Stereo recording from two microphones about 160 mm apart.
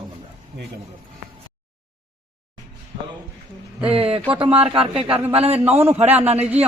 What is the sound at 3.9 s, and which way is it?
Speech, 35° right (ahead or behind).